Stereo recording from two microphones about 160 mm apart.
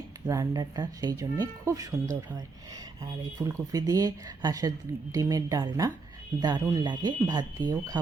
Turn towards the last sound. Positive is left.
turn(degrees=-25)  # may be behind; listen again after turning